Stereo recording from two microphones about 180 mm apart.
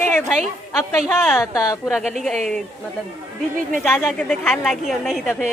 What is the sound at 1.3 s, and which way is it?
Speech, 20° left (ahead or behind).